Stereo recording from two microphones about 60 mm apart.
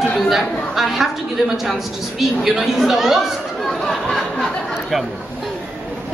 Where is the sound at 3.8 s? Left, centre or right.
Centre.